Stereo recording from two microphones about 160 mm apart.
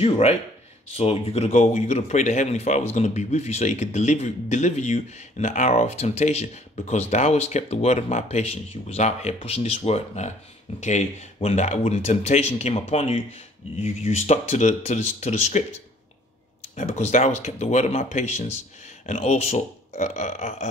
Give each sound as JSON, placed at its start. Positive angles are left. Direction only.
{"t": 0.0, "sound": "a man's voice", "side_deg": 40}
{"t": 16.7, "sound": "speech", "side_deg": 45}